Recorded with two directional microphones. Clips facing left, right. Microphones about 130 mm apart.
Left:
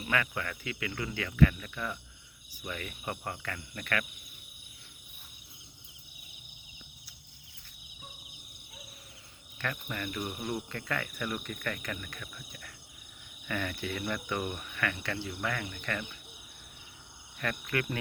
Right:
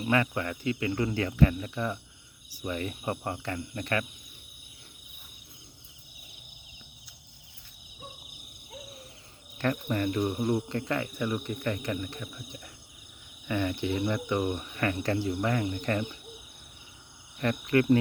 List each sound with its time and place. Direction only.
0.0 s speech: 30° right (ahead or behind)
9.6 s speech: 30° right (ahead or behind)
17.4 s speech: 30° right (ahead or behind)